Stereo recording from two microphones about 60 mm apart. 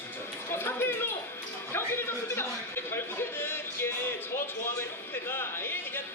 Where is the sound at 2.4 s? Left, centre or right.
Left.